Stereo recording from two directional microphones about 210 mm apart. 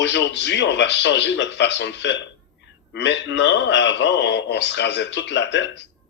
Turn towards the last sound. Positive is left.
turn(degrees=55)  # may be behind; listen again after turning